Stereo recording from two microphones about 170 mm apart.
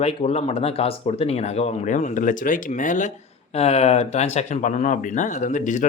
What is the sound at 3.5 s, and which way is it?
Speech, 40° left (ahead or behind).